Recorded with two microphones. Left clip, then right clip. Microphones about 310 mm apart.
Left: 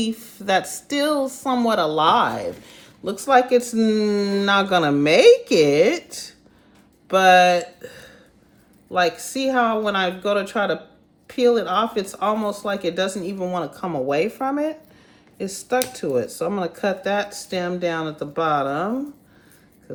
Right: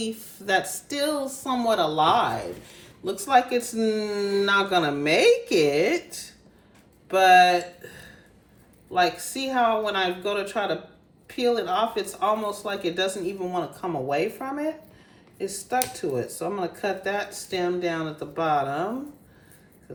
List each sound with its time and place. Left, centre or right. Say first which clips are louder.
0.0 s speech: left 5 dB; left